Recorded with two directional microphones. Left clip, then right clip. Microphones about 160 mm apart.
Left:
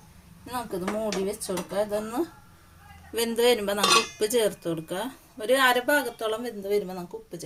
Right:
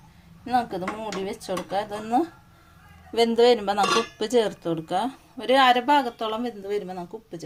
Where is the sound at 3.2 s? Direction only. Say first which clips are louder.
Right 4 dB; 30° right (ahead or behind).